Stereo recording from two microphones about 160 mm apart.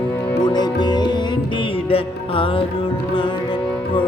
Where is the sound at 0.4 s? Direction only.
25° left (ahead or behind).